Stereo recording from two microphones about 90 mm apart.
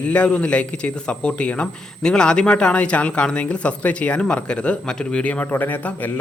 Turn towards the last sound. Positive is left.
turn(degrees=20)  # may be behind; listen again after turning